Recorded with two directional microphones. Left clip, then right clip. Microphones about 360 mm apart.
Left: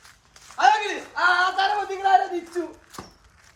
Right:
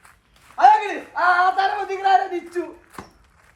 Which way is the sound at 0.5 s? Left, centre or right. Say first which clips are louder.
Right 5 dB; centre.